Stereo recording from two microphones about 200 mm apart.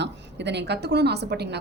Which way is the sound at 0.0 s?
60° right (ahead or behind).